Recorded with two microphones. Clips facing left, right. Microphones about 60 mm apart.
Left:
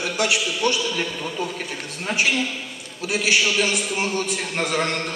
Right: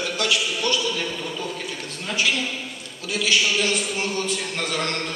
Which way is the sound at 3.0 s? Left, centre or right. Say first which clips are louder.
Left 1 dB; left.